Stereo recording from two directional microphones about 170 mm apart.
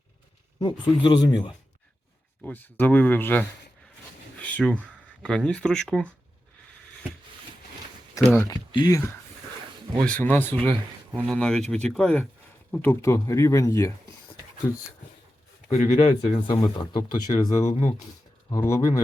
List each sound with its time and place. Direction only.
1.0 s speech: 25° left (ahead or behind)
2.4 s speech: 10° left (ahead or behind)
4.4 s a sound: 10° left (ahead or behind)
5.2 s speech: 5° left (ahead or behind)
8.3 s speech: 15° left (ahead or behind)
10.0 s speech: 10° left (ahead or behind)
15.7 s speech: 40° left (ahead or behind)
16.6 s speech: 25° left (ahead or behind)
17.3 s speech: 40° left (ahead or behind)
18.5 s speech: 15° left (ahead or behind)